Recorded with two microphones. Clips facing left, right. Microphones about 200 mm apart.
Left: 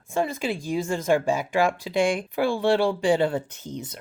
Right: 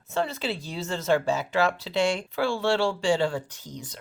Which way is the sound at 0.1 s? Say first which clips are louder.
Left 3 dB; 10° left (ahead or behind).